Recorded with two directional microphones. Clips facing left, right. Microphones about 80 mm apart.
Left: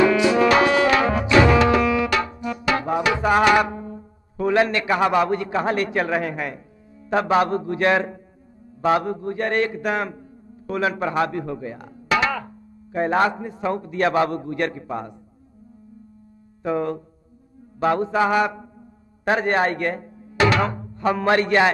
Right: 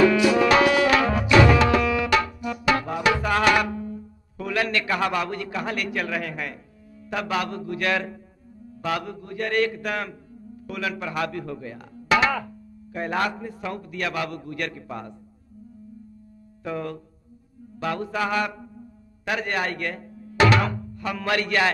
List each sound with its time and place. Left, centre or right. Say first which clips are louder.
0.1 s music: left 2 dB; left
7.1 s a man's voice: left 8 dB; left
16.6 s a man's voice: left 7 dB; left